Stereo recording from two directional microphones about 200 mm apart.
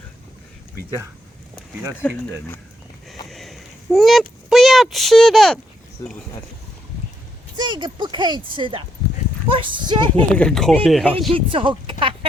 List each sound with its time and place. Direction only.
2.0 s speech: 10° left (ahead or behind)
3.2 s a sound: centre (ahead or behind)
7.5 s speech: 20° right (ahead or behind)
10.3 s speech: 5° left (ahead or behind)
11.3 s speech: 25° right (ahead or behind)